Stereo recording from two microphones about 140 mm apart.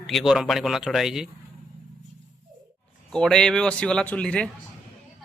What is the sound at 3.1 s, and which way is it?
Speech, 5° left (ahead or behind).